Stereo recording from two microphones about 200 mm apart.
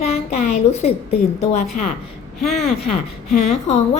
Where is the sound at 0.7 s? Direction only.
35° left (ahead or behind).